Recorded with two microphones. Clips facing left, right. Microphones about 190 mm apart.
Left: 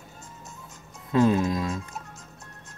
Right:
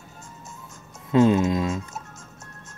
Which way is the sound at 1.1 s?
25° right (ahead or behind).